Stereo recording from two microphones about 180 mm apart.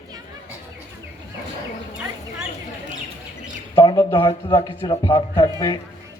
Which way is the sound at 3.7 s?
20° left (ahead or behind).